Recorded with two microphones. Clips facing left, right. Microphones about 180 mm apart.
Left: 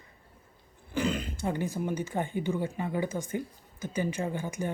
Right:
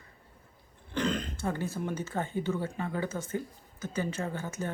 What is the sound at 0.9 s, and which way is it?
Speech, 10° left (ahead or behind).